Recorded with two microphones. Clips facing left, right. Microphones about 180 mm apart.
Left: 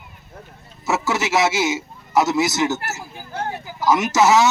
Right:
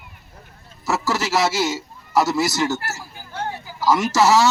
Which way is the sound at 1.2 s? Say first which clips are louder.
Left 2 dB; 20° left (ahead or behind).